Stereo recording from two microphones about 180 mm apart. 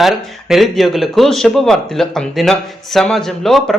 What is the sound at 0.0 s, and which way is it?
Speech, centre (ahead or behind).